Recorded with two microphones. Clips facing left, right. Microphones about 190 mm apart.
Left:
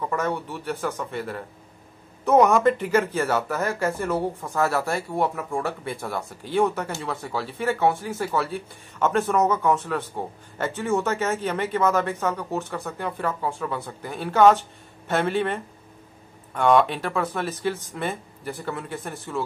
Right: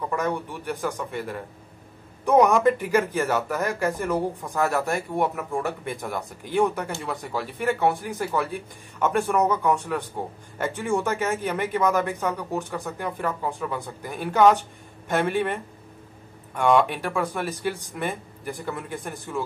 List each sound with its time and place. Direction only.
0.1 s speech: 15° right (ahead or behind)